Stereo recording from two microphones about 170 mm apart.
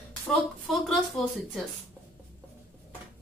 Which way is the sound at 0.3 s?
Centre (ahead or behind).